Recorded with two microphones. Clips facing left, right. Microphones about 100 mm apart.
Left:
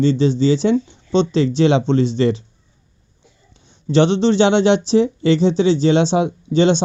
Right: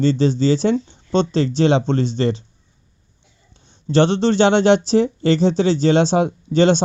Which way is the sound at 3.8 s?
40° right (ahead or behind).